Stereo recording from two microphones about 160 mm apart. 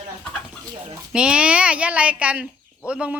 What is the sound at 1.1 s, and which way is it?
Speech, 5° right (ahead or behind).